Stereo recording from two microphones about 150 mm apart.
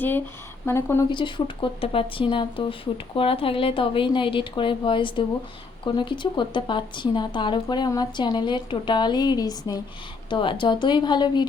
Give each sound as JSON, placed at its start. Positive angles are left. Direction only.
{"t": 0.6, "sound": "speech", "side_deg": 15}
{"t": 1.1, "sound": "a woman's voice", "side_deg": 35}